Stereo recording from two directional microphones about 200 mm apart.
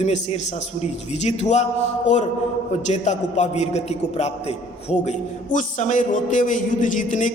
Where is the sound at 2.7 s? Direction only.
35° left (ahead or behind).